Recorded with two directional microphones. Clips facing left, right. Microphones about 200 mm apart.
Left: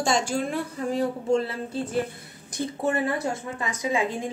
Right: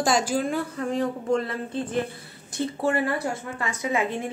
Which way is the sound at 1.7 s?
10° left (ahead or behind).